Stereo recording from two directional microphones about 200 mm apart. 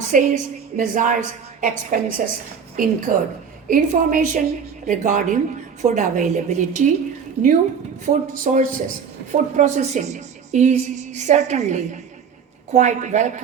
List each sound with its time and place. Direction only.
0.1 s a woman's voice: 40° right (ahead or behind)
8.0 s a woman's voice: 40° right (ahead or behind)